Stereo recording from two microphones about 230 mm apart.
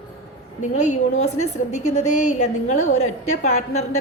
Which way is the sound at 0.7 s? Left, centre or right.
Left.